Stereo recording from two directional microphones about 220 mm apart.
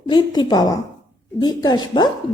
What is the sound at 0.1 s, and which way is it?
A woman's voice, 20° left (ahead or behind).